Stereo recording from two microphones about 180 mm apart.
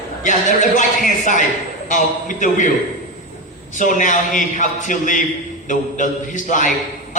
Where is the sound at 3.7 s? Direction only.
45° left (ahead or behind).